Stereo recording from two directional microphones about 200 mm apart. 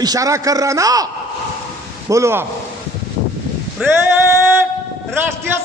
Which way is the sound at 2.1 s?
15° right (ahead or behind).